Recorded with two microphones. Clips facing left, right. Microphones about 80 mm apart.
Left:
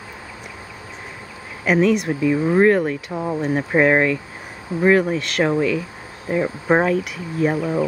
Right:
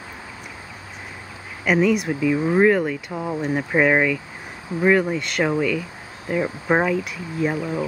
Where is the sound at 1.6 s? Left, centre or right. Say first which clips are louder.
Left 2 dB; centre.